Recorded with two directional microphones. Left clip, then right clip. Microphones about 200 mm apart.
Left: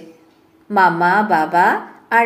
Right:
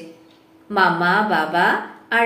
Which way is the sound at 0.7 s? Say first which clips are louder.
Left 3 dB; 45° left (ahead or behind).